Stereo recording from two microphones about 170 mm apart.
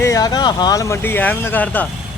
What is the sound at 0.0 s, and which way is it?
Speech, 20° left (ahead or behind).